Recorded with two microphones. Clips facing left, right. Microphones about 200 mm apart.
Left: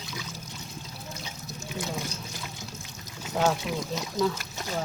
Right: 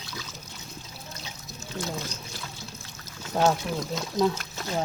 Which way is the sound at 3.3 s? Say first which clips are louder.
Right 2 dB; 10° left (ahead or behind).